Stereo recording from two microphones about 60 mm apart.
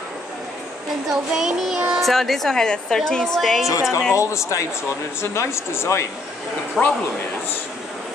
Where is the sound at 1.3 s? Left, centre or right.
Centre.